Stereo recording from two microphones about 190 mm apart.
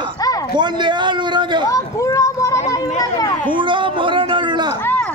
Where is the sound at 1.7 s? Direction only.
15° left (ahead or behind).